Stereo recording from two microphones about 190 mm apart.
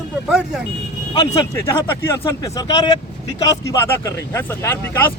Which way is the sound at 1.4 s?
15° left (ahead or behind).